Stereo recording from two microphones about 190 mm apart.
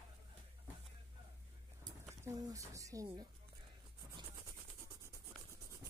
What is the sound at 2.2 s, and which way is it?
Speech, 20° right (ahead or behind).